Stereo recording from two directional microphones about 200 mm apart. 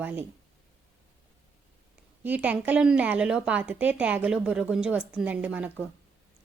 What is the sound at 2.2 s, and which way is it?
A woman's voice, 5° right (ahead or behind).